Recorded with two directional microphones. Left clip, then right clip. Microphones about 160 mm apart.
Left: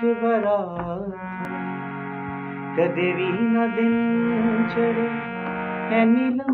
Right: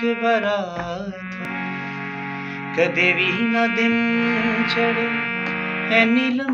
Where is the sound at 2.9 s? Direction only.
5° left (ahead or behind).